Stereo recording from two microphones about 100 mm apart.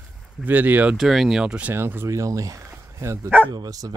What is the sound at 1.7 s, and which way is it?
Speech, 25° right (ahead or behind).